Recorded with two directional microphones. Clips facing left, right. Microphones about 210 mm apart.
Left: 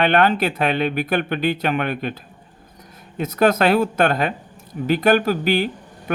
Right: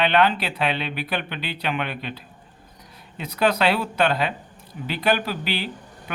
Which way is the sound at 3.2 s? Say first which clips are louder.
Left 5 dB; 45° left (ahead or behind).